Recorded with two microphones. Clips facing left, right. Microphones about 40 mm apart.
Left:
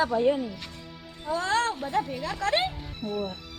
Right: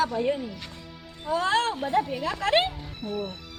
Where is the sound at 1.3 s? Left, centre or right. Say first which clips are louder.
Right 2 dB; centre.